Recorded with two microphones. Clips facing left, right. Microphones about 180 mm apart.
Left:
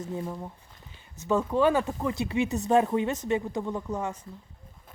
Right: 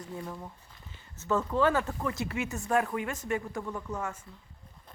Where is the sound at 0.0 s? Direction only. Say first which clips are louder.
Left 5 dB; 20° left (ahead or behind).